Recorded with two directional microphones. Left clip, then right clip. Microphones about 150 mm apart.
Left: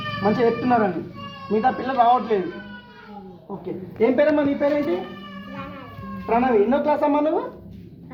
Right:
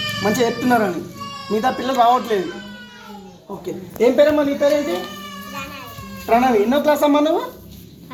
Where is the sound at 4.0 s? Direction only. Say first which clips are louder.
Right 4 dB; 40° right (ahead or behind).